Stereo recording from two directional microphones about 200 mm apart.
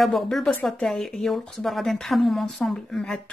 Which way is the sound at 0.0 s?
Centre (ahead or behind).